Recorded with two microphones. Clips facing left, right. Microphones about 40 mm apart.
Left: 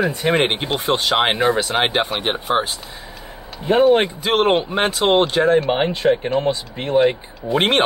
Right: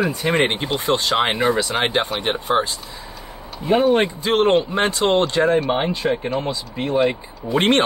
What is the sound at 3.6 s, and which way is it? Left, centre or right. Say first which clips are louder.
Speech: left 2 dB; left.